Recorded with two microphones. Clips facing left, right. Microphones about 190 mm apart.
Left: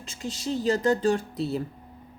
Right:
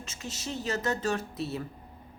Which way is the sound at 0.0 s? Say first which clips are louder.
Left 6 dB; 35° left (ahead or behind).